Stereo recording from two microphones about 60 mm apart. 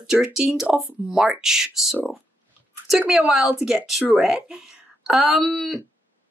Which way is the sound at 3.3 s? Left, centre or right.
Centre.